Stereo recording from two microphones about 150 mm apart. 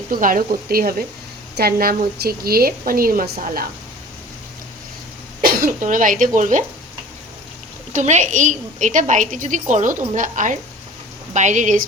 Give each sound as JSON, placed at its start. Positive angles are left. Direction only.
{"t": 0.1, "sound": "a woman's voice", "side_deg": -65}
{"t": 5.4, "sound": "speech", "side_deg": -65}
{"t": 7.9, "sound": "a woman's voice", "side_deg": -55}